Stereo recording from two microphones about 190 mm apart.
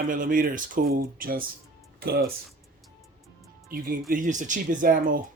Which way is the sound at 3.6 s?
50° right (ahead or behind).